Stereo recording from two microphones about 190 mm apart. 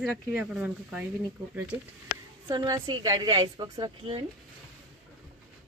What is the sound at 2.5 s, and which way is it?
A woman's voice, 20° right (ahead or behind).